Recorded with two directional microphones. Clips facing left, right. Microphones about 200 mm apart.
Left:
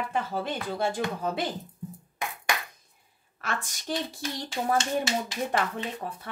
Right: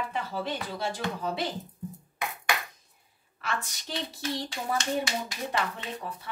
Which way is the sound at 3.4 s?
50° left (ahead or behind).